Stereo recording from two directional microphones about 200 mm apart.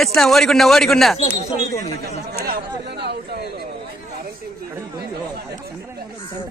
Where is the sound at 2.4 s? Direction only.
50° right (ahead or behind).